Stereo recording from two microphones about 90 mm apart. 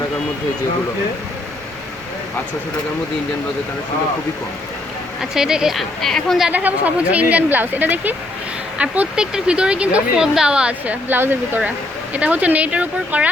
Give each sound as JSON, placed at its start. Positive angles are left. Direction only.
{"t": 5.2, "sound": "speech", "side_deg": -5}
{"t": 6.5, "sound": "speech", "side_deg": -20}